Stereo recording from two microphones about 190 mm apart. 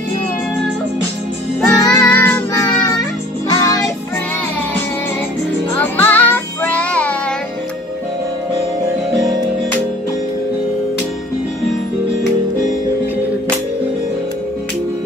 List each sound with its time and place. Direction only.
1.7 s music: 20° left (ahead or behind)
5.8 s music: 10° left (ahead or behind)